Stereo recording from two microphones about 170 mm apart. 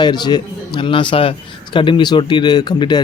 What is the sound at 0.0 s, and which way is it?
Speech, 25° left (ahead or behind).